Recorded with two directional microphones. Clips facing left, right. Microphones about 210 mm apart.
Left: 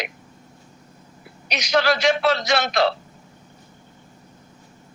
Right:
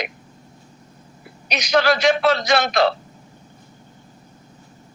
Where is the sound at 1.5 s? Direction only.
55° right (ahead or behind).